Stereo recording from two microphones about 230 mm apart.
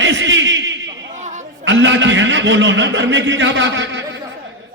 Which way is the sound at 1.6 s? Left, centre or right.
Right.